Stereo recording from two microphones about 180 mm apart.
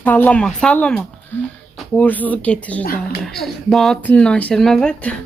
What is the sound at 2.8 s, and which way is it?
Speech, 55° left (ahead or behind).